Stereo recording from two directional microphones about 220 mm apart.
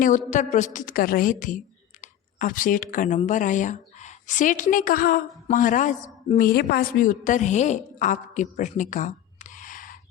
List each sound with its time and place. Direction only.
0.0 s a woman's voice: 35° left (ahead or behind)